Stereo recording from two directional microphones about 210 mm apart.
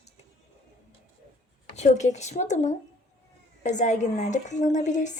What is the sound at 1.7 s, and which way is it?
A woman's voice, 35° left (ahead or behind).